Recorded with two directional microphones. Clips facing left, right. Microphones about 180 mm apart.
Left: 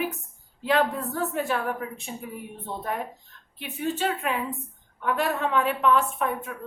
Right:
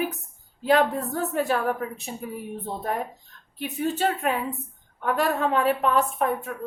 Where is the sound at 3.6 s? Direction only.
40° right (ahead or behind).